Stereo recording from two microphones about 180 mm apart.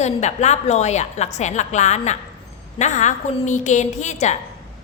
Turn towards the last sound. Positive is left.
turn(degrees=40)  # may be behind; listen again after turning